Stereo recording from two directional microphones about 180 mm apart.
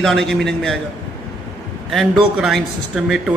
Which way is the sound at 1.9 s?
Centre (ahead or behind).